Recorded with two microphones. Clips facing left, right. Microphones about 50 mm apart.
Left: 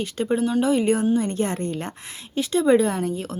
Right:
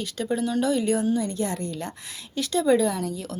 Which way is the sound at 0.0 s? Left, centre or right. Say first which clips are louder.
Left 4 dB; left.